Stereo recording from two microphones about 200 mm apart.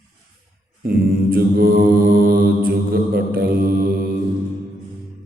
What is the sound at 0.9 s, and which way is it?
Mantra, 45° right (ahead or behind).